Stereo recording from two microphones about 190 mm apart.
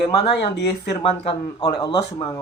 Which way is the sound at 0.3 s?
65° left (ahead or behind).